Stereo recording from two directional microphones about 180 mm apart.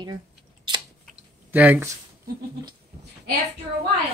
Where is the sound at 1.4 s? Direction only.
10° right (ahead or behind).